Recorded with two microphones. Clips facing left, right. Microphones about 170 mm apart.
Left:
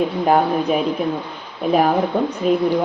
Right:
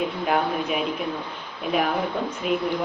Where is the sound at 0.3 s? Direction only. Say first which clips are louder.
Left 8 dB; 40° left (ahead or behind).